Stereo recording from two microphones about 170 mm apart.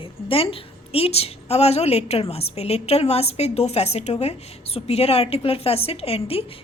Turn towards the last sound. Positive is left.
turn(degrees=35)  # may be behind; listen again after turning